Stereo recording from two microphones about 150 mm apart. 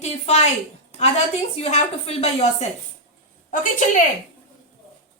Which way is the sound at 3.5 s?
60° left (ahead or behind).